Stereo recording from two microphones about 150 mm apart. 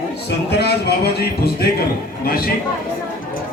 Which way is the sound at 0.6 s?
90° left.